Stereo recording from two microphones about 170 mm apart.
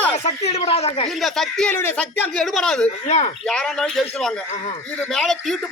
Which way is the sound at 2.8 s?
40° left (ahead or behind).